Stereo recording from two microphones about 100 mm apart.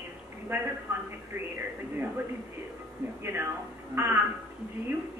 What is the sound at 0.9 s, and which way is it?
Speech, 30° right (ahead or behind).